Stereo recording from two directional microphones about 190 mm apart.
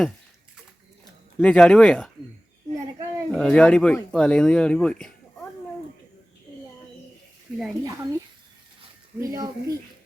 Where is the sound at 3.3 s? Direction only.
5° left (ahead or behind).